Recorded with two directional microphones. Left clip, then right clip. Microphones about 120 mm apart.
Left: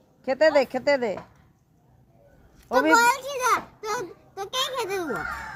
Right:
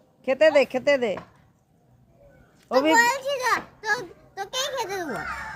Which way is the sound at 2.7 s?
20° right (ahead or behind).